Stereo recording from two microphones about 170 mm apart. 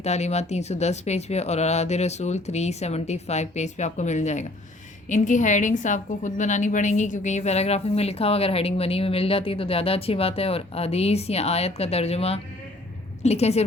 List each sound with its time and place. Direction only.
0.0 s a woman's voice: 40° left (ahead or behind)